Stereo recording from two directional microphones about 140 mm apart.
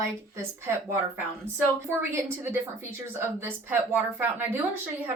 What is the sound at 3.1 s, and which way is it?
A woman's voice, 15° right (ahead or behind).